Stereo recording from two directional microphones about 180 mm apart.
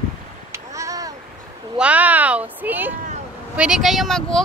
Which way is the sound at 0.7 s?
20° right (ahead or behind).